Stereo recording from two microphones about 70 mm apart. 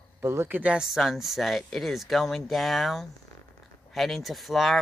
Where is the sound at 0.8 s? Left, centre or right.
Centre.